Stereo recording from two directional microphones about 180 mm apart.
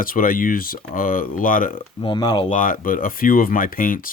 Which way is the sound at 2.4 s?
45° left (ahead or behind).